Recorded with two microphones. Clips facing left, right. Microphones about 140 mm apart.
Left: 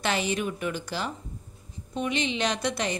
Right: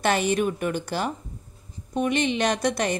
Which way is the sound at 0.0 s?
50° right (ahead or behind).